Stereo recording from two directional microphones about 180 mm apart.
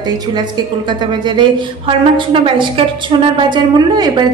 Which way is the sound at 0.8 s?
25° right (ahead or behind).